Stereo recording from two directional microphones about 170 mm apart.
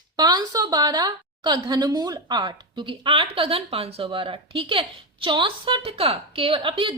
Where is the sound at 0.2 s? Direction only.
25° right (ahead or behind).